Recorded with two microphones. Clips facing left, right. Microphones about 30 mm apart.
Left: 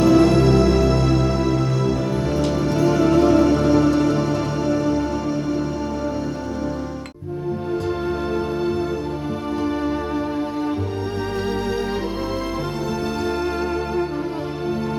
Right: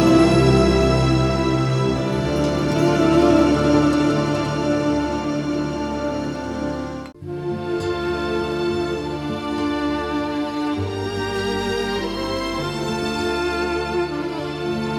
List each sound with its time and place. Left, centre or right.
0.0 s music: centre
13.2 s music: right